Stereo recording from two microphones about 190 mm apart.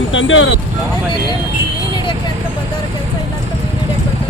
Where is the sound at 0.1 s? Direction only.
90° left.